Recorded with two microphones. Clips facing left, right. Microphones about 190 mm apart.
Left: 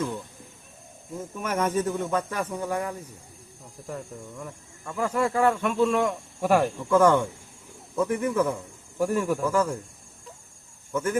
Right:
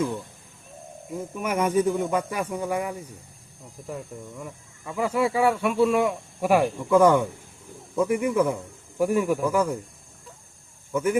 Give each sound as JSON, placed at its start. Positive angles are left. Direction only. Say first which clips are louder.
{"t": 1.4, "sound": "speech", "louder": "right 3 dB", "side_deg": -10}
{"t": 10.9, "sound": "speech", "louder": "right 3 dB", "side_deg": -10}